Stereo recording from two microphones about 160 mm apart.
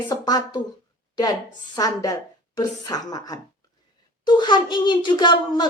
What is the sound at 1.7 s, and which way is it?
Speech, 25° left (ahead or behind).